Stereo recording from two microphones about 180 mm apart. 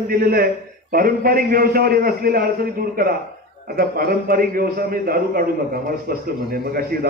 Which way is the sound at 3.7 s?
55° right (ahead or behind).